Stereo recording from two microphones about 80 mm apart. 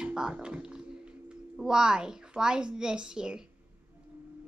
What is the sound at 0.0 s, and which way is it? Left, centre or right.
A woman's voice, centre.